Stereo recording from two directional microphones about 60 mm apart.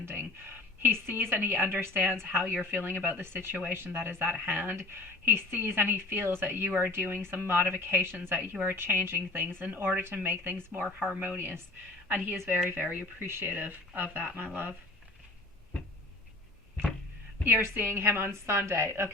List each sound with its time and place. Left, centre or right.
0.0 s a sound: right
0.8 s speech: right
11.1 s speech: right
11.3 s speech: right
17.4 s a woman's voice: right